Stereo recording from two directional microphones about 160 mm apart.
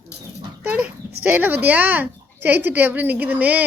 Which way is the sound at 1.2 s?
10° right (ahead or behind).